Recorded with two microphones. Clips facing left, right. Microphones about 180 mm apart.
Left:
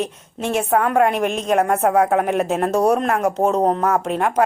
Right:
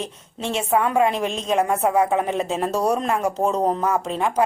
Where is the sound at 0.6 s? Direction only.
60° left (ahead or behind).